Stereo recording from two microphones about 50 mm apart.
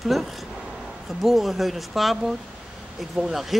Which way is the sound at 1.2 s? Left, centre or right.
Centre.